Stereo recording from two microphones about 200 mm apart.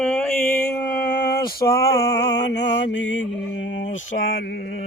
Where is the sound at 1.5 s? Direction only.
50° left (ahead or behind).